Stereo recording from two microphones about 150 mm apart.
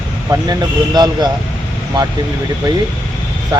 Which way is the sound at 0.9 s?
25° right (ahead or behind).